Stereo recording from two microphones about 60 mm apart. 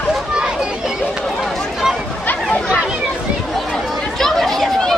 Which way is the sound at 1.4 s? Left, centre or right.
Centre.